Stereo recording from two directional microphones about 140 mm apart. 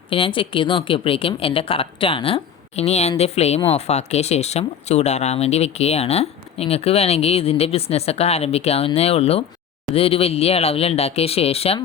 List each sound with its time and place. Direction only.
0.1 s speech: 40° left (ahead or behind)